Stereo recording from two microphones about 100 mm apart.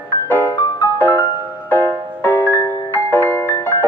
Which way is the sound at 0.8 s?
20° left (ahead or behind).